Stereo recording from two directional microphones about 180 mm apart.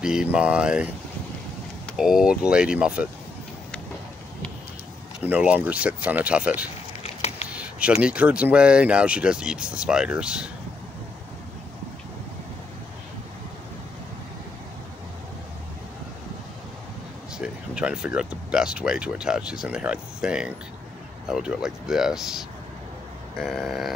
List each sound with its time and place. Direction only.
0.0 s speech: 5° right (ahead or behind)
2.0 s speech: 5° right (ahead or behind)
5.2 s speech: 10° right (ahead or behind)
7.0 s a sound: 35° left (ahead or behind)
7.4 s a sound: 5° right (ahead or behind)
8.0 s speech: 5° right (ahead or behind)
17.4 s speech: 5° right (ahead or behind)
23.4 s speech: centre (ahead or behind)